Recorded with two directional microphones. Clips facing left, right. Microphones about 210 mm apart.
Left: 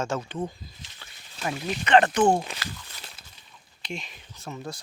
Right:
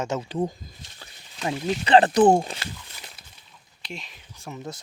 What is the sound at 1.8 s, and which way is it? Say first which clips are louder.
Speech: right 3 dB; 35° right (ahead or behind).